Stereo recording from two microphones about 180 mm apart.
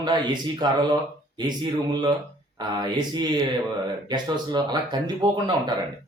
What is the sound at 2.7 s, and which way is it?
Speech, 25° right (ahead or behind).